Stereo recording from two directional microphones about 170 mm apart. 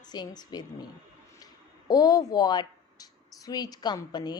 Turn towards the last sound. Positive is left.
turn(degrees=25)  # may be behind; listen again after turning